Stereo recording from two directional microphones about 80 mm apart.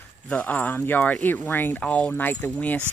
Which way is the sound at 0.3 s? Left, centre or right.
Centre.